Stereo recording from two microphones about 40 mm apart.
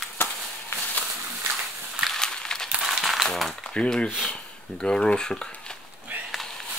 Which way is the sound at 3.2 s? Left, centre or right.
Centre.